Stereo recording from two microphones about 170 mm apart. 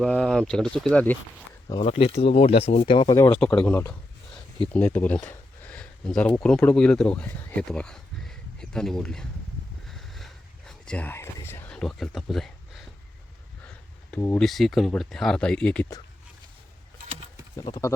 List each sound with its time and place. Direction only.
0.0 s speech: 5° left (ahead or behind)
1.8 s speech: 35° left (ahead or behind)
3.2 s speech: 10° left (ahead or behind)
9.9 s a sound: centre (ahead or behind)
10.7 s speech: 5° left (ahead or behind)
14.1 s speech: 15° left (ahead or behind)
14.3 s speech: centre (ahead or behind)
17.6 s speech: 20° left (ahead or behind)